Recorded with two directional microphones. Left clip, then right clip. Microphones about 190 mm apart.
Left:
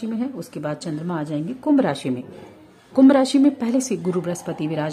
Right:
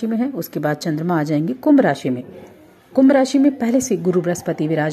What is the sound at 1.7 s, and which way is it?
A woman's voice, 10° right (ahead or behind).